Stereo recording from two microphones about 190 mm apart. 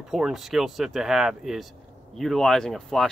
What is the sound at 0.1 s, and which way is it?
Speech, centre (ahead or behind).